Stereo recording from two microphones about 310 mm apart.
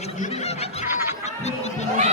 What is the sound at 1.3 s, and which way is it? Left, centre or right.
Music, left.